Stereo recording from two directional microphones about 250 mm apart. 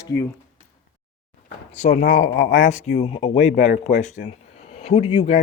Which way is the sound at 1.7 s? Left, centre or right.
Left.